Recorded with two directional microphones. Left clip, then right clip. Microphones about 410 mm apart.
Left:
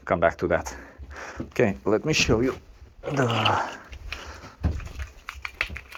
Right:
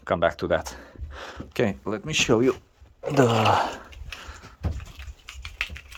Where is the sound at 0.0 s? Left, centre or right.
Centre.